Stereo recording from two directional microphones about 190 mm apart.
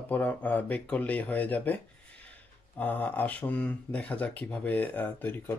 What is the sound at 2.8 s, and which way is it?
Speech, 10° left (ahead or behind).